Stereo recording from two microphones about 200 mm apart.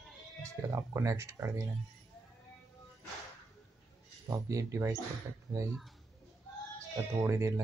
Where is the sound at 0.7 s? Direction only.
15° right (ahead or behind).